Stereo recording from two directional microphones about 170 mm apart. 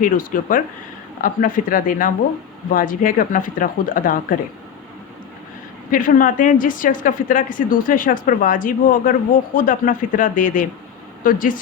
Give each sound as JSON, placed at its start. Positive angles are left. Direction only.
{"t": 0.0, "sound": "a woman's voice", "side_deg": 55}
{"t": 5.9, "sound": "a woman's voice", "side_deg": 55}